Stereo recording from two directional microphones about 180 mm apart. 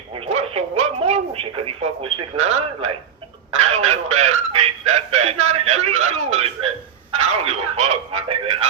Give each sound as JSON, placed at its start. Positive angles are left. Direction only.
{"t": 0.1, "sound": "radio", "side_deg": -30}
{"t": 3.5, "sound": "music", "side_deg": -35}